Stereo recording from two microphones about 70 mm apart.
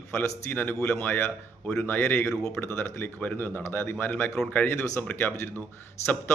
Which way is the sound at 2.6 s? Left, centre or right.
Left.